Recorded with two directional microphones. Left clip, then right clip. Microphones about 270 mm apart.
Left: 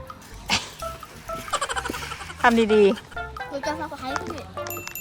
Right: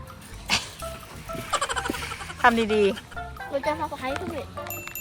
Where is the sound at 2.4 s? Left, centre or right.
Centre.